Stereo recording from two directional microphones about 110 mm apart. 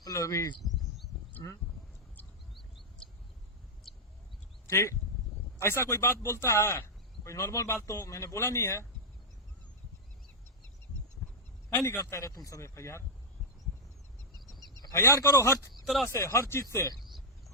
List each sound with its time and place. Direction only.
0.0 s a sound: 30° left (ahead or behind)
0.6 s a sound: centre (ahead or behind)
1.4 s speech: 35° left (ahead or behind)
3.9 s bird: centre (ahead or behind)
4.6 s speech: 25° left (ahead or behind)
11.7 s speech: 30° left (ahead or behind)
14.8 s a sound: 35° left (ahead or behind)
15.0 s speech: 25° left (ahead or behind)
15.7 s speech: centre (ahead or behind)
16.0 s speech: 25° left (ahead or behind)